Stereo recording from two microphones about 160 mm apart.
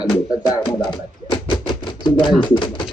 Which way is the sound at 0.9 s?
30° left (ahead or behind).